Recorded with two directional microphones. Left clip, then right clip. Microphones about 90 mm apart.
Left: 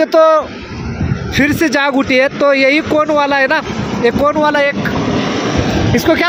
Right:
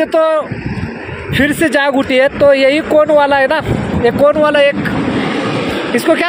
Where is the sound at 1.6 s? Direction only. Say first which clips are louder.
Right 1 dB; 45° left (ahead or behind).